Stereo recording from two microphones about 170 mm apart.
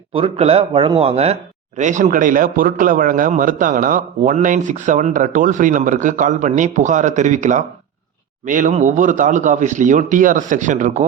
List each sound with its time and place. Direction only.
0.1 s speech: 35° right (ahead or behind)